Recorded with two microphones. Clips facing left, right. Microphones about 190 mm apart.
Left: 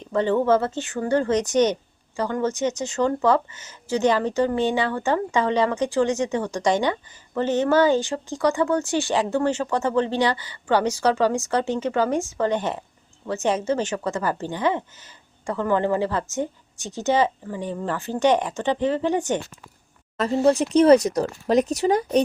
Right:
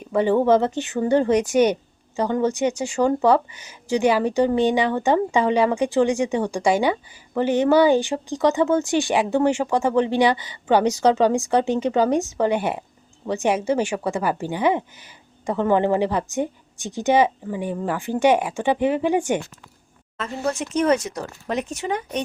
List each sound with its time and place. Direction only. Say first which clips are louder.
0.0 s speech: right 2 dB; 10° right (ahead or behind)
20.1 s speech: left 7 dB; 35° left (ahead or behind)